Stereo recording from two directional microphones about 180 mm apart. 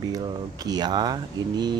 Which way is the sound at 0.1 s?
20° right (ahead or behind).